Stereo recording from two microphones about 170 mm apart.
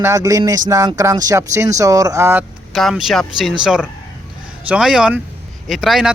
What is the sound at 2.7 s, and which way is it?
A man's voice, centre (ahead or behind).